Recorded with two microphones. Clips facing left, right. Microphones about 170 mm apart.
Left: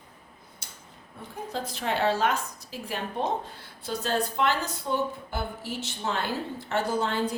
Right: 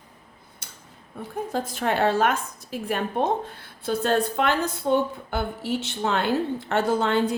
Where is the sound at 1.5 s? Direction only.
50° right (ahead or behind).